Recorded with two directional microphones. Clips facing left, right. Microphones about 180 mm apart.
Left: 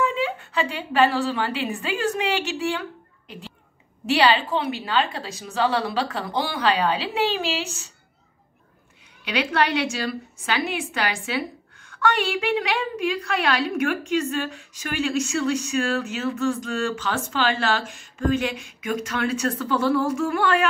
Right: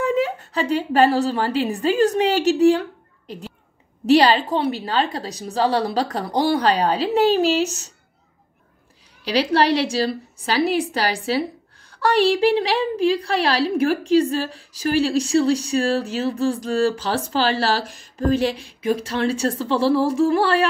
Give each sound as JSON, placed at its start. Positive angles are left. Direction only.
{"t": 0.0, "sound": "a woman's voice", "side_deg": -40}
{"t": 9.2, "sound": "a woman's voice", "side_deg": -35}